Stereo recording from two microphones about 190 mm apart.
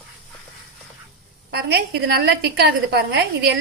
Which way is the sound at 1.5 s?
60° right (ahead or behind).